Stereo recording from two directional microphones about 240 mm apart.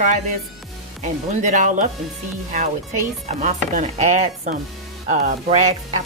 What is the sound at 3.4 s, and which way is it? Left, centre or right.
Speech, right.